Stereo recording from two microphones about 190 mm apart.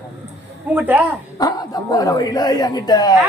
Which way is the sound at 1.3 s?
20° left (ahead or behind).